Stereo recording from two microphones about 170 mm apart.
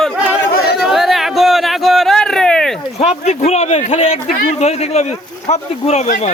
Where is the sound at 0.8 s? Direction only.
Centre (ahead or behind).